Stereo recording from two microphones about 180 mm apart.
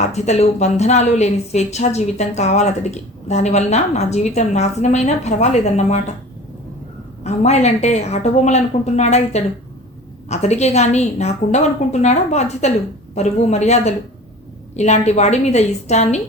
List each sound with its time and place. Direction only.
0.0 s a woman's voice: 40° left (ahead or behind)
7.3 s a woman's voice: 40° left (ahead or behind)